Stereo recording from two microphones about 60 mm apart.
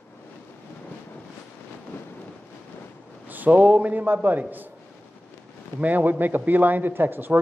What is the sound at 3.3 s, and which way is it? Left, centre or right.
A man's voice, right.